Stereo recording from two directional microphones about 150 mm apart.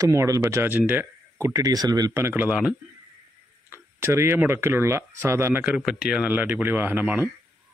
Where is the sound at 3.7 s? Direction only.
15° right (ahead or behind).